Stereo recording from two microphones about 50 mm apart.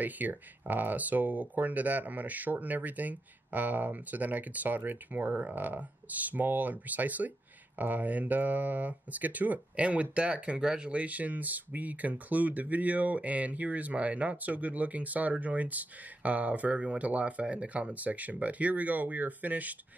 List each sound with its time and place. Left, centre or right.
0.0 s speech: right; by 10.9 s centre
10.9 s speech: right